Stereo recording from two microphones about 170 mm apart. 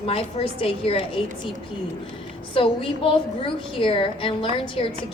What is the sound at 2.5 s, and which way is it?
A woman's voice, 30° left (ahead or behind).